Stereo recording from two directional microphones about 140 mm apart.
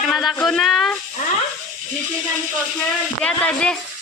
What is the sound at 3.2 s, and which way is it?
Speech, 5° left (ahead or behind).